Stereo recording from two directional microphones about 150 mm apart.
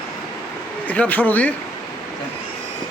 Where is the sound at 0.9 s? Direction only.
10° left (ahead or behind).